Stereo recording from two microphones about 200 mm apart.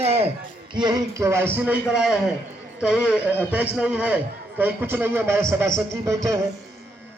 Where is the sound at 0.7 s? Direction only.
20° right (ahead or behind).